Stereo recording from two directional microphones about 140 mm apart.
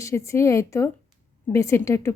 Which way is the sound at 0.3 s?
20° left (ahead or behind).